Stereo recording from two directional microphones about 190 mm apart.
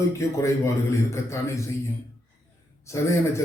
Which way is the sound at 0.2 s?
15° left (ahead or behind).